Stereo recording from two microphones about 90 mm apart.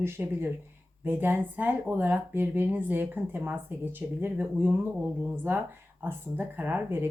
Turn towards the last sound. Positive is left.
turn(degrees=-20)  # may be behind; listen again after turning